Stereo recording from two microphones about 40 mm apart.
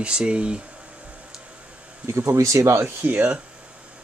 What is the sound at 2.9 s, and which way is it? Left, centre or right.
Speech, right.